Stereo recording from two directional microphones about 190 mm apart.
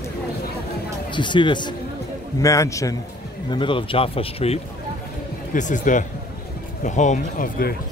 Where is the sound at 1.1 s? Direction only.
25° left (ahead or behind).